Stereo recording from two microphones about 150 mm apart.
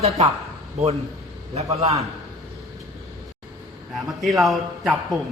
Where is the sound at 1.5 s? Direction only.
45° right (ahead or behind).